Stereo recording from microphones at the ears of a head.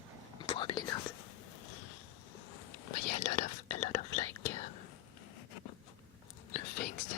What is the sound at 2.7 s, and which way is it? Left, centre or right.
Whispering, left.